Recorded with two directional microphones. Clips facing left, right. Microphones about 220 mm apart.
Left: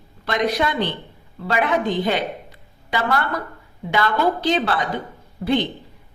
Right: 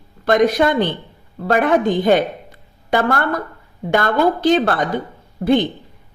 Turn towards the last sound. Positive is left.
turn(degrees=-50)  # may be behind; listen again after turning